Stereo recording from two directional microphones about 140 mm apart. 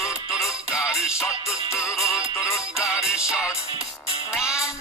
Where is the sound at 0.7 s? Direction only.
5° right (ahead or behind).